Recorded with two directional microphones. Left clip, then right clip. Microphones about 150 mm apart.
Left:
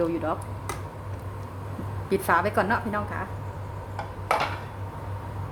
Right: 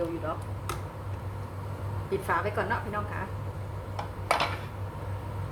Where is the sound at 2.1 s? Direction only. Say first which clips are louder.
Left 6 dB; 55° left (ahead or behind).